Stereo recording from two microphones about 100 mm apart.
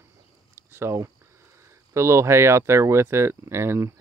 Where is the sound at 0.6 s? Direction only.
25° right (ahead or behind).